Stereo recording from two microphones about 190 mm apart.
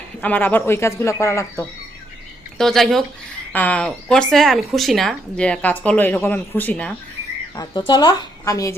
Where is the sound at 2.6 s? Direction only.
Centre (ahead or behind).